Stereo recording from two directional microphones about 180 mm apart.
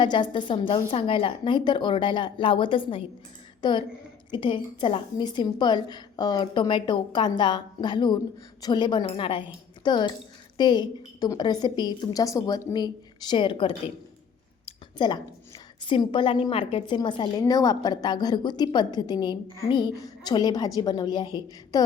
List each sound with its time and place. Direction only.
0.0 s a woman's voice: 25° left (ahead or behind)